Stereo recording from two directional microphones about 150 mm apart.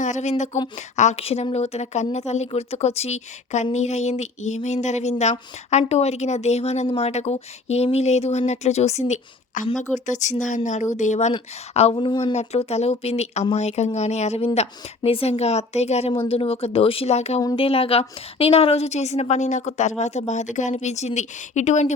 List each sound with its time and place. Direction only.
0.0 s a sound: 50° left (ahead or behind)
0.9 s a woman's voice: 45° left (ahead or behind)
11.9 s speech: 30° left (ahead or behind)
12.2 s a woman's voice: 45° left (ahead or behind)